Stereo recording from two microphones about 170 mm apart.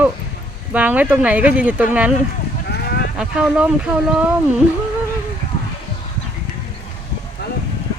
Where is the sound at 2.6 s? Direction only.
70° left (ahead or behind).